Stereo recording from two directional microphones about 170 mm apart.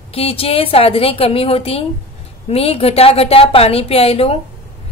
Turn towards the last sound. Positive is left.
turn(degrees=35)  # may be behind; listen again after turning